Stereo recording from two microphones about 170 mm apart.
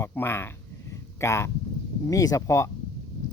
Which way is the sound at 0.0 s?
15° left (ahead or behind).